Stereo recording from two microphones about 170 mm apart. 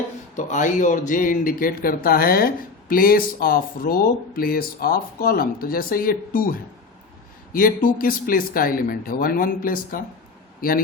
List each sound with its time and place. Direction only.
0.3 s a man's voice: 45° left (ahead or behind)